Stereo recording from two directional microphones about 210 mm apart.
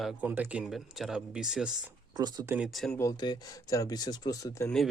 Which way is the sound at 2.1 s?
20° right (ahead or behind).